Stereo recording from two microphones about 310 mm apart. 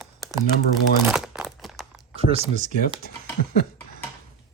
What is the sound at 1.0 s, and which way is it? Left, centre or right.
Crumpling, centre.